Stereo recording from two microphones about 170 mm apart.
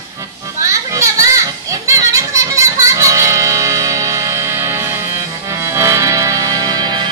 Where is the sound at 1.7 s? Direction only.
20° right (ahead or behind).